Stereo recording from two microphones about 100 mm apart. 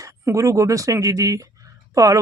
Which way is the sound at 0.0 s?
30° right (ahead or behind).